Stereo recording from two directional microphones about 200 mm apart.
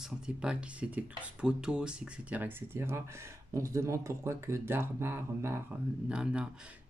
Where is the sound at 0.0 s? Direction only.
5° right (ahead or behind).